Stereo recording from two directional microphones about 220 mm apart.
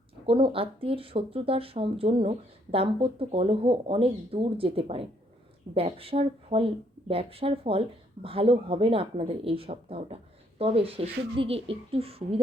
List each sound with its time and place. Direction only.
0.3 s speech: 25° right (ahead or behind)